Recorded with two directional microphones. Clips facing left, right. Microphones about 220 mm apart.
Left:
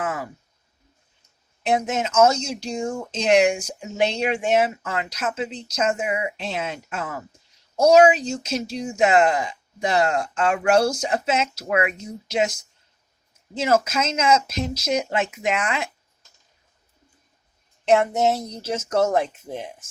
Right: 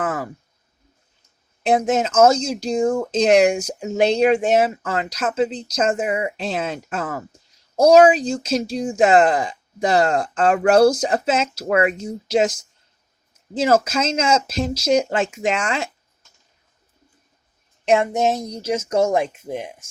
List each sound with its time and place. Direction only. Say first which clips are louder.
0.0 s a sound: right 3 dB; 35° right (ahead or behind)
1.6 s speech: right 5 dB; 35° right (ahead or behind)
17.8 s speech: right 1 dB; 15° right (ahead or behind)